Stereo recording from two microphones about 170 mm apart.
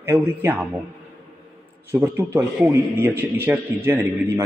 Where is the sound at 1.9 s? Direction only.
15° right (ahead or behind).